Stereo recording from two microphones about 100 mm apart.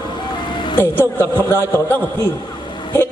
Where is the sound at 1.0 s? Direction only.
25° right (ahead or behind).